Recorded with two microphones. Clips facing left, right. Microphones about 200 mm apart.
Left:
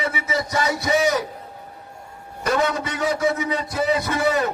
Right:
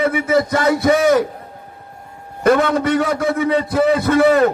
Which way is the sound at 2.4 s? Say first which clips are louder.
Right 8 dB; 55° right (ahead or behind).